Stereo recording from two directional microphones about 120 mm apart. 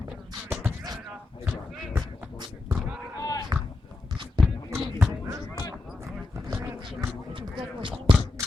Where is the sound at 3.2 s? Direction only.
30° left (ahead or behind).